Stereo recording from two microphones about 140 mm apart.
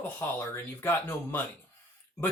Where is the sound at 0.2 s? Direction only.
15° left (ahead or behind).